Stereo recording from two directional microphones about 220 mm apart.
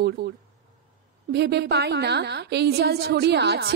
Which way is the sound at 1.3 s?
50° right (ahead or behind).